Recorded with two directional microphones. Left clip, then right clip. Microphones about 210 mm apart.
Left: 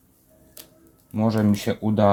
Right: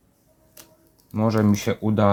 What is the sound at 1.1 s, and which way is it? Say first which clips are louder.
Speech: right 1 dB; 20° right (ahead or behind).